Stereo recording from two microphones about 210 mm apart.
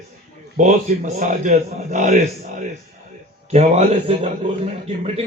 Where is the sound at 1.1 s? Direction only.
35° right (ahead or behind).